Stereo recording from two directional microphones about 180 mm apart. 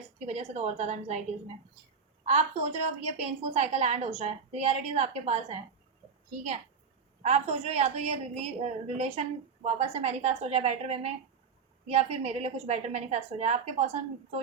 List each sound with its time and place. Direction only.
0.3 s a woman's voice: 35° right (ahead or behind)
2.2 s a woman's voice: 40° right (ahead or behind)
7.2 s a woman's voice: 40° right (ahead or behind)